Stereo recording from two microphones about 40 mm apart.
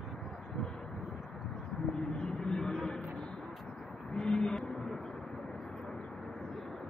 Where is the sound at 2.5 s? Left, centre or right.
Centre.